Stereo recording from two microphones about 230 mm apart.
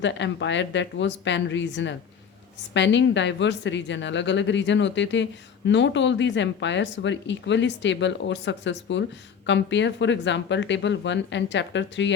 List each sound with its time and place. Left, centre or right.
0.0 s a woman's voice: left